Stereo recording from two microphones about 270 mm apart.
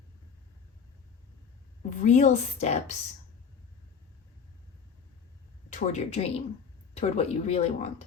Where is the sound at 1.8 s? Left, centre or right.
Left.